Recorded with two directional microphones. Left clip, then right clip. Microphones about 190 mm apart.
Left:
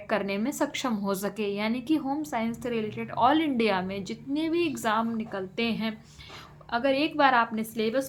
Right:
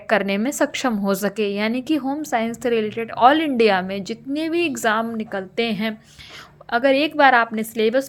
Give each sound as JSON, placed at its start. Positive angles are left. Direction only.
{"t": 0.1, "sound": "a woman's voice", "side_deg": -45}